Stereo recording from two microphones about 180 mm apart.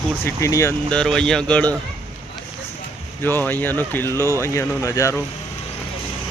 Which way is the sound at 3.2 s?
10° left (ahead or behind).